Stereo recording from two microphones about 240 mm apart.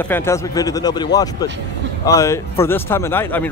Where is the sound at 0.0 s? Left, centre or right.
Centre.